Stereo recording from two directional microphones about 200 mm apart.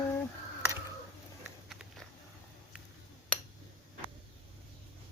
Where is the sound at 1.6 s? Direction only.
Centre (ahead or behind).